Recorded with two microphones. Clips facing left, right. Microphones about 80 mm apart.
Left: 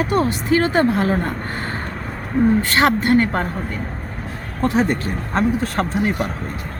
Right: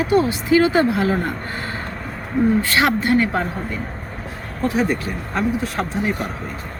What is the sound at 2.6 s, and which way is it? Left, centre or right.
Speech, left.